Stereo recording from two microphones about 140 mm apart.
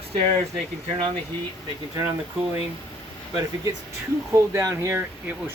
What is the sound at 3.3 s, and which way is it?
Speech, 30° right (ahead or behind).